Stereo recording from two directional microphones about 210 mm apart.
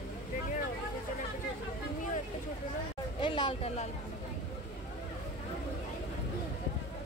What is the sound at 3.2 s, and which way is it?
Speech, 20° left (ahead or behind).